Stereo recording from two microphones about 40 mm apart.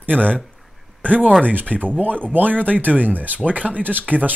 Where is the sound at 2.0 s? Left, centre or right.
Right.